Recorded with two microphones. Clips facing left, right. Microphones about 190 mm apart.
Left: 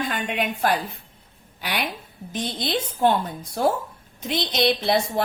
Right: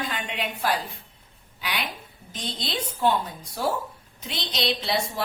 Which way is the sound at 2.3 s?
55° left (ahead or behind).